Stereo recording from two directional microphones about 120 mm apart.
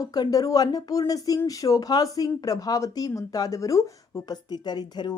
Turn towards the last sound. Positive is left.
turn(degrees=35)  # may be behind; listen again after turning